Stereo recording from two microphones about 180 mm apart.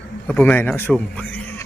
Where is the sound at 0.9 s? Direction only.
10° left (ahead or behind).